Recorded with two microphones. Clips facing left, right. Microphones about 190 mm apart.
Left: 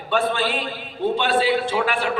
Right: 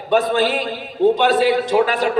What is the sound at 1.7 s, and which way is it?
Speech, 40° right (ahead or behind).